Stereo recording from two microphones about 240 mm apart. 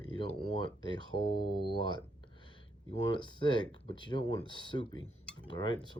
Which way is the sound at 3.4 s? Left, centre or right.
Centre.